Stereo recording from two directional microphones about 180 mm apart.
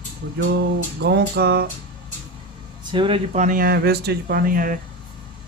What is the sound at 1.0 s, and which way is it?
Speech, 65° right (ahead or behind).